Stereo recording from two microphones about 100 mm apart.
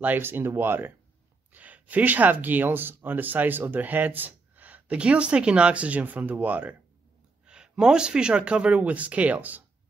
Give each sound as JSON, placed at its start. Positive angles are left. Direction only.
{"t": 0.0, "sound": "speech", "side_deg": -20}